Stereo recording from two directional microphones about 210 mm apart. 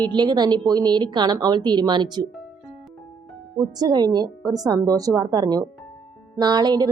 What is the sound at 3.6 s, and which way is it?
A woman's voice, 15° right (ahead or behind).